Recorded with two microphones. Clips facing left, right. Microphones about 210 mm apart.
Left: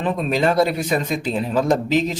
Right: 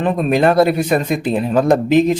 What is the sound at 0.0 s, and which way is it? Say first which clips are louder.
Speech: right 5 dB; 55° right (ahead or behind).